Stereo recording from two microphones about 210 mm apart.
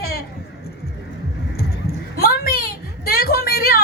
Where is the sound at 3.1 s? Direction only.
50° left (ahead or behind).